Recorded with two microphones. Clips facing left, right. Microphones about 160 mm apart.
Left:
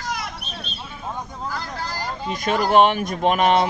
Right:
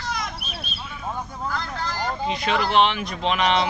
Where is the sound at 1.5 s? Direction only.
5° left (ahead or behind).